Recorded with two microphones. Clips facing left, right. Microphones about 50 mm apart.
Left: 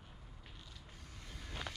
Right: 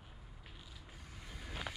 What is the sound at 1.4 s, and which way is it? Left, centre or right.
Vehicle, centre.